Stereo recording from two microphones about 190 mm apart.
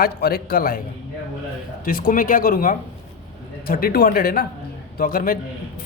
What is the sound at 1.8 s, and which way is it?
Speech, 50° left (ahead or behind).